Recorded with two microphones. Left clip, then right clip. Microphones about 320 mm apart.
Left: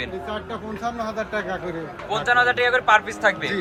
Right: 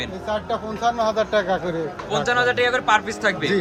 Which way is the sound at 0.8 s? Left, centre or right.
Right.